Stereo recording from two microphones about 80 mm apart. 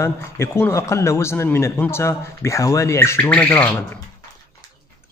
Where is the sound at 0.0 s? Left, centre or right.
Left.